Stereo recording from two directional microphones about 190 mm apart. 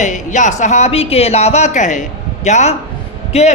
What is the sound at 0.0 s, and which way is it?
A woman's voice, 40° left (ahead or behind).